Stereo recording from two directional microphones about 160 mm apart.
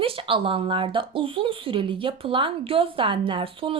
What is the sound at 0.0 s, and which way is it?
Speech, 35° right (ahead or behind).